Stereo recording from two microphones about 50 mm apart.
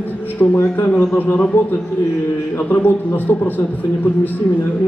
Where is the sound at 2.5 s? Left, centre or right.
Left.